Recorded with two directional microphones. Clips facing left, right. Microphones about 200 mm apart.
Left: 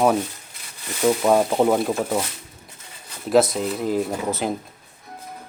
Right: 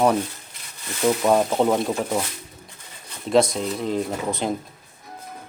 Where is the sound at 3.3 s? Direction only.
5° left (ahead or behind).